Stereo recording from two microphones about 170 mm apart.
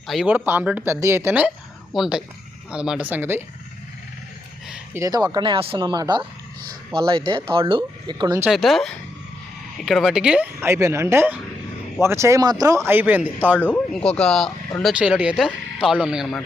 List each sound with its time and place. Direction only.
0.1 s speech: 5° right (ahead or behind)
4.9 s speech: 20° right (ahead or behind)
8.4 s speech: centre (ahead or behind)
13.6 s speech: 10° left (ahead or behind)